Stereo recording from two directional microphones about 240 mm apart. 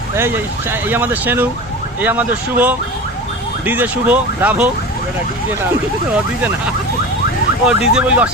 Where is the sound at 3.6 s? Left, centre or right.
Centre.